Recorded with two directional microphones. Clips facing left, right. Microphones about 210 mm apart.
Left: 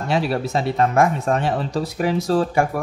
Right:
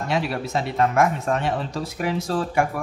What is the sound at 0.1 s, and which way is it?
Speech, 30° left (ahead or behind).